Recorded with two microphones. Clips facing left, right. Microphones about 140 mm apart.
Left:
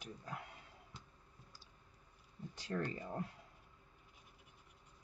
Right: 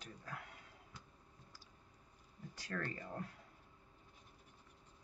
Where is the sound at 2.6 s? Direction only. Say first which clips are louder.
Left 3 dB; 20° left (ahead or behind).